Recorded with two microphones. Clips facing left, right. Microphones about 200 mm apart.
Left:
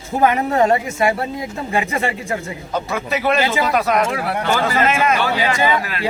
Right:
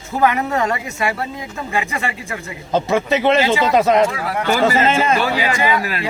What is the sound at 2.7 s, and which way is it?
A man's voice, 25° right (ahead or behind).